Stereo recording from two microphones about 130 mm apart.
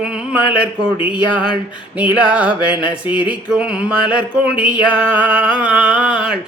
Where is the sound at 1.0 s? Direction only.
10° right (ahead or behind).